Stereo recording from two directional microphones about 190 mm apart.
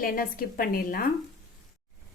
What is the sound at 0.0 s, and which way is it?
A woman's voice, 50° left (ahead or behind).